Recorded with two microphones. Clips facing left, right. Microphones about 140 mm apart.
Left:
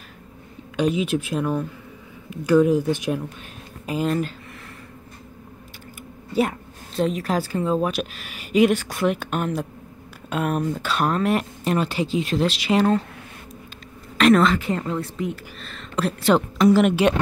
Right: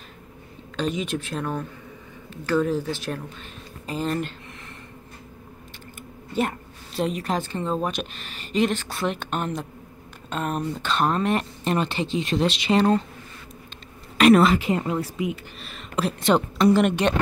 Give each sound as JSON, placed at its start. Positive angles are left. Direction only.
{"t": 0.7, "sound": "speech", "side_deg": 5}
{"t": 7.0, "sound": "speech", "side_deg": 0}
{"t": 14.1, "sound": "a sound", "side_deg": -5}
{"t": 14.5, "sound": "speech", "side_deg": -15}
{"t": 15.0, "sound": "speech", "side_deg": -5}